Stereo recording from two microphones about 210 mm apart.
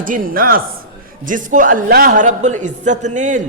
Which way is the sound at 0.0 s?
40° right (ahead or behind).